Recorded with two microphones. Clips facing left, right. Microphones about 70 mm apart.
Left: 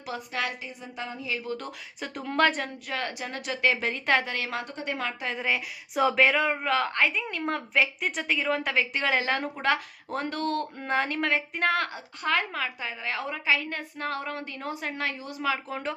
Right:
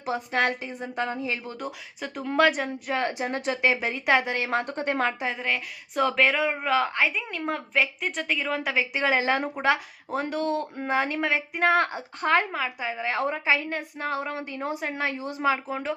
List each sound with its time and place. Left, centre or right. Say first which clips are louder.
0.0 s a woman's voice: right 6 dB; right
0.4 s a woman's voice: right 6 dB; right
1.6 s a woman's voice: right 3 dB; centre
2.8 s a woman's voice: right 6 dB; right
4.6 s a woman's voice: right 6 dB; right
5.3 s a woman's voice: even; centre
11.7 s a woman's voice: right 5 dB; right
12.5 s a woman's voice: right 3 dB; centre
13.7 s a woman's voice: right 3 dB; centre
15.7 s a woman's voice: right 3 dB; centre